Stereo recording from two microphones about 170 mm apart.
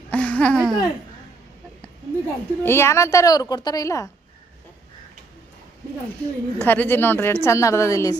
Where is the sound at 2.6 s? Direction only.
15° left (ahead or behind).